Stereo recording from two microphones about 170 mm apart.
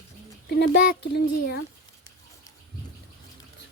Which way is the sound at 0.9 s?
70° left (ahead or behind).